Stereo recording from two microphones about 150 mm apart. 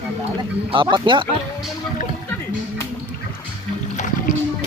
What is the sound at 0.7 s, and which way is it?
Speech, 35° right (ahead or behind).